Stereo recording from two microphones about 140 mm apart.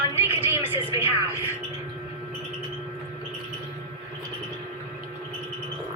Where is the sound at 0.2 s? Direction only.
15° right (ahead or behind).